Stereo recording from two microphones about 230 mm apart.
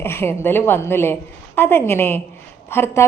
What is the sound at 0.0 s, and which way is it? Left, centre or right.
A woman's voice, centre.